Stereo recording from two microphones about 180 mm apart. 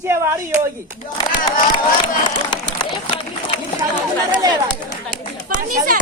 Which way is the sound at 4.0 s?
25° right (ahead or behind).